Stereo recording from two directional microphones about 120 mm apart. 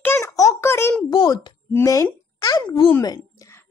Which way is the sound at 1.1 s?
35° left (ahead or behind).